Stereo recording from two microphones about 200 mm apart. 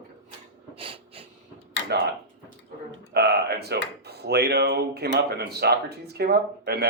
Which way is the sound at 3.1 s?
55° right (ahead or behind).